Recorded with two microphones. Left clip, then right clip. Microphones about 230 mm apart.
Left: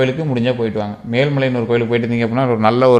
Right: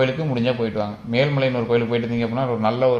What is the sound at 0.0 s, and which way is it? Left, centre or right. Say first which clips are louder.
A man's voice: left 4 dB; left.